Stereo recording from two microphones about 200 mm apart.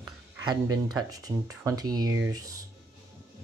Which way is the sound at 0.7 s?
15° right (ahead or behind).